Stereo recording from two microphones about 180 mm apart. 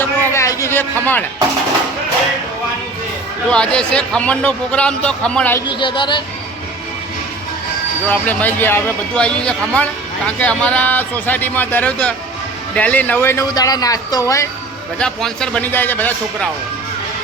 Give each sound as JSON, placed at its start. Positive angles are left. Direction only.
{"t": 0.0, "sound": "a sound", "side_deg": 15}
{"t": 3.5, "sound": "a man's voice", "side_deg": 5}
{"t": 5.6, "sound": "speech", "side_deg": 25}
{"t": 8.0, "sound": "a man's voice", "side_deg": 10}
{"t": 14.9, "sound": "a man's voice", "side_deg": 5}